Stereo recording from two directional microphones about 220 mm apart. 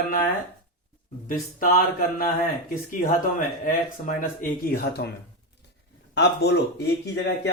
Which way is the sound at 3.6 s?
35° left (ahead or behind).